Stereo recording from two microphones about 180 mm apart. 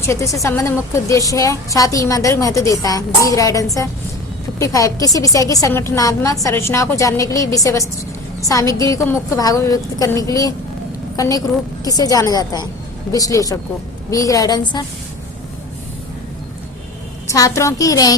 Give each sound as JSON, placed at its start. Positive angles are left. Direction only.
{"t": 0.0, "sound": "a woman's voice", "side_deg": 15}
{"t": 17.2, "sound": "a woman's voice", "side_deg": 20}